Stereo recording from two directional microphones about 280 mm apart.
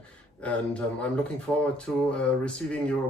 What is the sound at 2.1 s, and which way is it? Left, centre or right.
Speech, centre.